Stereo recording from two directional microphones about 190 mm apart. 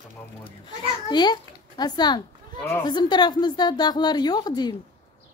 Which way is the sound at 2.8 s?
20° left (ahead or behind).